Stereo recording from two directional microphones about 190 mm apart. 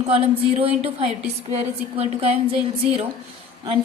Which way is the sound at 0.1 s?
30° right (ahead or behind).